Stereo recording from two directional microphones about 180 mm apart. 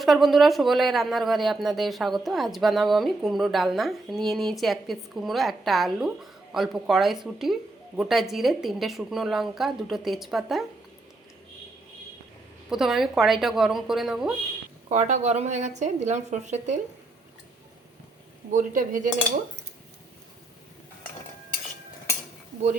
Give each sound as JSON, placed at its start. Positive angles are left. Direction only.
{"t": 0.0, "sound": "speech", "side_deg": 0}
{"t": 12.7, "sound": "speech", "side_deg": 0}
{"t": 14.8, "sound": "a woman's voice", "side_deg": -40}
{"t": 18.5, "sound": "speech", "side_deg": -45}